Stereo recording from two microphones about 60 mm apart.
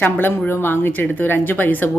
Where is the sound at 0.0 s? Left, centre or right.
Left.